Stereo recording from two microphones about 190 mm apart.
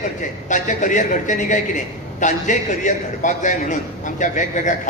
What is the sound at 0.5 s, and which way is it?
Speech, 40° left (ahead or behind).